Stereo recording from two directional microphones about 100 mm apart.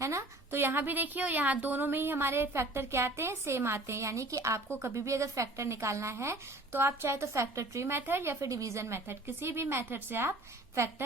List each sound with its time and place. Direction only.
0.0 s a woman's voice: 30° right (ahead or behind)